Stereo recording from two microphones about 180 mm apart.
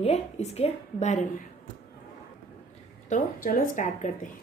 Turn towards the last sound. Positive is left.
turn(degrees=50)  # may be behind; listen again after turning